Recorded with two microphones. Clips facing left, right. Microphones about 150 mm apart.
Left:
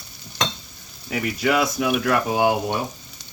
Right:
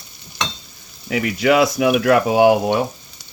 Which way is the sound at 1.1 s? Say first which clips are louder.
Right 5 dB; 90° right.